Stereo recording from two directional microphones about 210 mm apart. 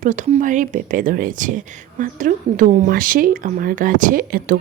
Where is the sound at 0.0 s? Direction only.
35° right (ahead or behind).